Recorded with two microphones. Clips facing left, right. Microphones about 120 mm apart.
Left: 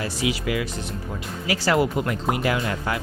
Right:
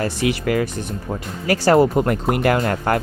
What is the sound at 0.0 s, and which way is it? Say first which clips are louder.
Speech: right 5 dB; 55° right (ahead or behind).